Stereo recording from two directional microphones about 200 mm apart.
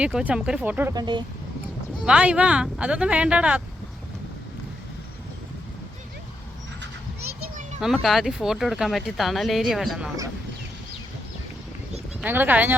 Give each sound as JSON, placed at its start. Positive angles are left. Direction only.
{"t": 0.0, "sound": "speech", "side_deg": -5}
{"t": 0.9, "sound": "speech", "side_deg": -20}
{"t": 2.0, "sound": "speech", "side_deg": -5}
{"t": 7.8, "sound": "speech", "side_deg": 0}
{"t": 12.2, "sound": "speech", "side_deg": -10}